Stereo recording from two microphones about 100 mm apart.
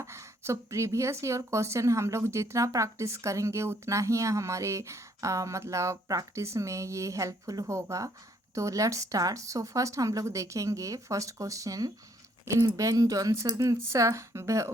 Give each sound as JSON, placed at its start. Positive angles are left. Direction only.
{"t": 0.0, "sound": "speech", "side_deg": -30}